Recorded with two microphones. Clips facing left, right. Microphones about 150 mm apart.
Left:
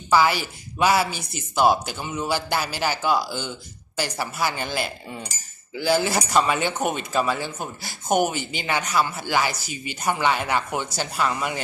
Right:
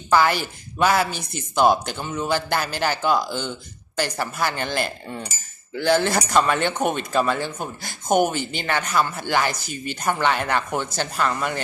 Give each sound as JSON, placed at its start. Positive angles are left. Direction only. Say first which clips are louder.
{"t": 0.1, "sound": "a man's voice", "louder": "right 1 dB", "side_deg": 10}
{"t": 9.6, "sound": "speech", "louder": "right 3 dB", "side_deg": -55}
{"t": 9.9, "sound": "a man's voice", "louder": "right 1 dB", "side_deg": 10}